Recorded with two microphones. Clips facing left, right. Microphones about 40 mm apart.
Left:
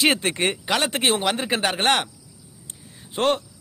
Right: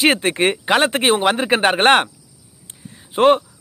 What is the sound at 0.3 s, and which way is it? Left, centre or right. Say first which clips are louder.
Speech: right 6 dB; right.